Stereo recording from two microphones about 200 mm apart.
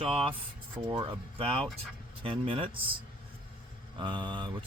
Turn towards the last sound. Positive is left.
turn(degrees=-25)  # may be behind; listen again after turning